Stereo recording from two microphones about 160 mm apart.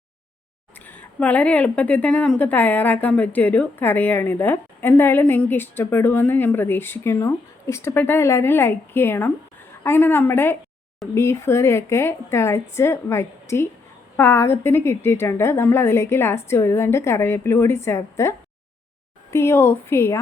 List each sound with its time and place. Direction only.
0.9 s a woman's voice: 10° left (ahead or behind)